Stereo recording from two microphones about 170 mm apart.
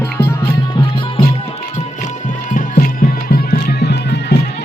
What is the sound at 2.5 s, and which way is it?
Music, 60° left (ahead or behind).